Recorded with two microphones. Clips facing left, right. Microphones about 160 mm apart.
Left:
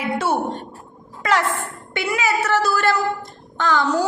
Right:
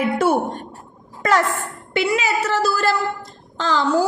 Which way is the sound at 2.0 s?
30° right (ahead or behind).